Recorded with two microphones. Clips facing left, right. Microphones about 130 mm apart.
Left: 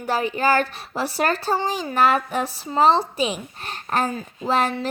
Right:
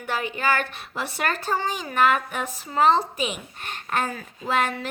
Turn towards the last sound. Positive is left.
turn(degrees=30)  # may be behind; listen again after turning